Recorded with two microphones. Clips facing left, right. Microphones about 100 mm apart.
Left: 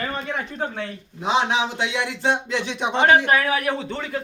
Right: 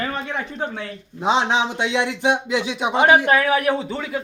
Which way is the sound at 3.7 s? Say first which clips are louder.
Right 3 dB; 5° right (ahead or behind).